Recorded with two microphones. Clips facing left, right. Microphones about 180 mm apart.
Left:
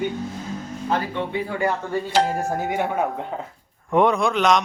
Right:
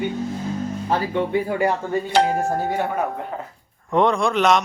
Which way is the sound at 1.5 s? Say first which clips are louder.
Right 3 dB; 25° right (ahead or behind).